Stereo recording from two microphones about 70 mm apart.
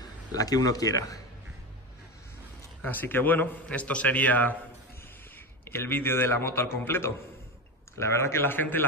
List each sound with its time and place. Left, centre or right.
0.0 s a man's voice: left
2.8 s a man's voice: left
3.6 s a man's voice: centre
5.7 s a man's voice: left